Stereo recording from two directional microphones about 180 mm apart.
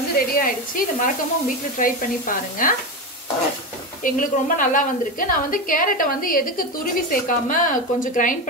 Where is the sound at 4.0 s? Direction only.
50° left (ahead or behind).